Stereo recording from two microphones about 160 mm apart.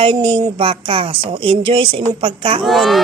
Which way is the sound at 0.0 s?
35° right (ahead or behind).